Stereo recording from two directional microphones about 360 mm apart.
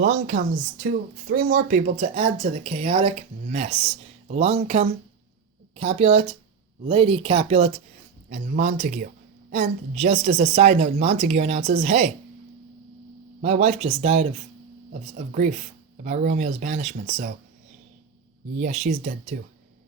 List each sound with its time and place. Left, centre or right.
0.0 s a woman's voice: right
13.4 s a woman's voice: centre
18.6 s a woman's voice: right